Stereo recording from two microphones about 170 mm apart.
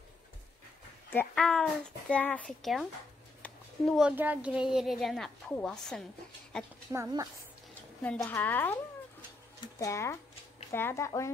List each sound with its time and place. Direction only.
1.1 s a woman's voice: 5° left (ahead or behind)
3.4 s a sound: centre (ahead or behind)
4.1 s a woman's voice: 10° right (ahead or behind)
6.9 s speech: 15° right (ahead or behind)
8.0 s speech: 10° left (ahead or behind)
9.8 s speech: 15° left (ahead or behind)